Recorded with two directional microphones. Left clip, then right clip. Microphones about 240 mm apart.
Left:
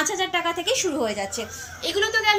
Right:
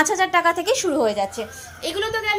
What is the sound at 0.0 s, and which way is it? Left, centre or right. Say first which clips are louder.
A woman's voice: right 6 dB; right.